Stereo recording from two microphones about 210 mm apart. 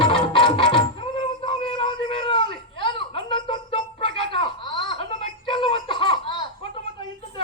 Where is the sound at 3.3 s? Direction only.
25° left (ahead or behind).